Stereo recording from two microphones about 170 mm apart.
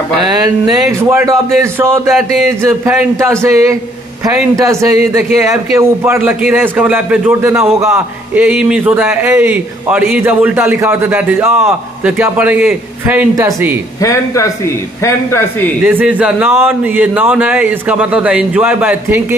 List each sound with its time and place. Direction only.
1.0 s a man's voice: 20° right (ahead or behind)
14.0 s a man's voice: 20° left (ahead or behind)
15.8 s a man's voice: 10° right (ahead or behind)